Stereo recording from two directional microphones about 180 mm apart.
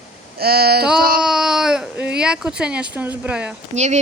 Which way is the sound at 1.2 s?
5° right (ahead or behind).